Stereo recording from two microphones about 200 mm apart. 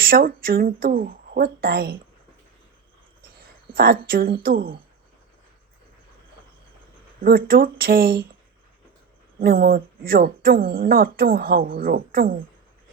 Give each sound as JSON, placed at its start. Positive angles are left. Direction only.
{"t": 0.0, "sound": "speech", "side_deg": -45}
{"t": 4.0, "sound": "speech", "side_deg": -50}
{"t": 7.2, "sound": "speech", "side_deg": -45}
{"t": 9.4, "sound": "speech", "side_deg": -45}